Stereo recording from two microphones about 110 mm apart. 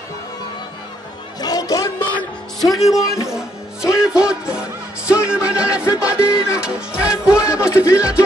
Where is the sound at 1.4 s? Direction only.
35° left (ahead or behind).